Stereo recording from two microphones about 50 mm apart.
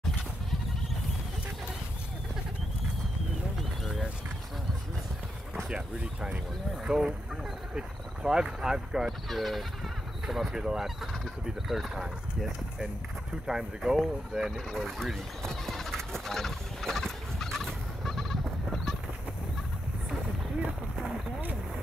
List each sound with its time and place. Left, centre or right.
3.8 s a sound: centre
5.7 s speech: centre
9.3 s speech: centre
15.4 s turkey: centre